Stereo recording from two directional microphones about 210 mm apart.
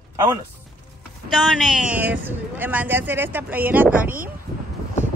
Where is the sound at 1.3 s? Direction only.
Centre (ahead or behind).